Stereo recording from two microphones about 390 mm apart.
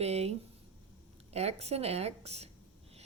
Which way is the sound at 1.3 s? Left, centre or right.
Centre.